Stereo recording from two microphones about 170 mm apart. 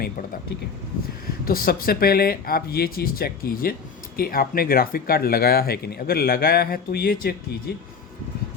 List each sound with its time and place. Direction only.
1.5 s speech: 60° left (ahead or behind)